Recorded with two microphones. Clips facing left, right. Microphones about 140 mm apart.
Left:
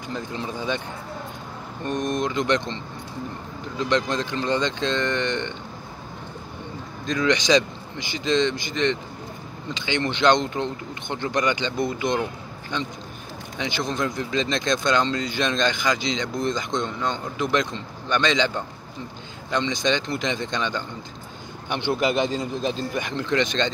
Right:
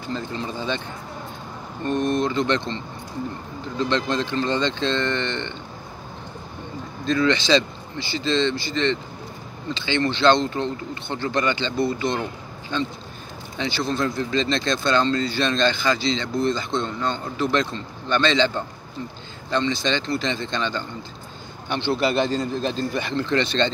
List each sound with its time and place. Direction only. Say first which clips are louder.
0.1 s speech: right 2 dB; 10° left (ahead or behind)
1.9 s speech: right 3 dB; 15° left (ahead or behind)
7.1 s speech: right 1 dB; 15° left (ahead or behind)
13.6 s speech: right 2 dB; 15° left (ahead or behind)
19.5 s speech: right 1 dB; 15° left (ahead or behind)